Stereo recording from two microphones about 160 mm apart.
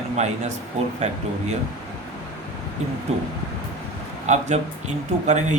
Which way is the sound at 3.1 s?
40° right (ahead or behind).